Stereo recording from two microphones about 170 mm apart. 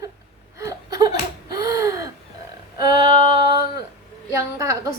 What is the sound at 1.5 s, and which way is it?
Gasp, 20° right (ahead or behind).